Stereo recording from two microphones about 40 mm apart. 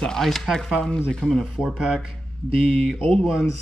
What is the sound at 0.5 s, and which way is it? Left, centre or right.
Speech, centre.